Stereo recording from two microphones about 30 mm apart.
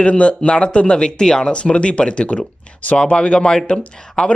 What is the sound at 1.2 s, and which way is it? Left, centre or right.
Speech, left.